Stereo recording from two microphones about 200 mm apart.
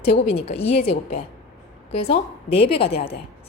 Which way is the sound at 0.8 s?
30° left (ahead or behind).